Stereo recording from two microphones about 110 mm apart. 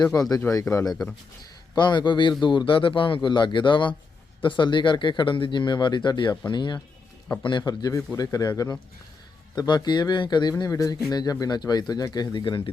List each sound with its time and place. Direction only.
0.2 s speech: 35° left (ahead or behind)
0.9 s speech: 5° left (ahead or behind)
1.7 s speech: 40° left (ahead or behind)
10.6 s speech: 30° left (ahead or behind); by 12.7 s 45° left (ahead or behind)